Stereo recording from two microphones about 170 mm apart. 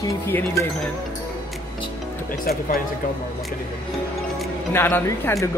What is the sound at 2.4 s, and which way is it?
Speech, 60° left (ahead or behind).